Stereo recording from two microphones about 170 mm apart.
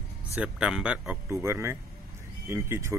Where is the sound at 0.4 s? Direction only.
5° right (ahead or behind).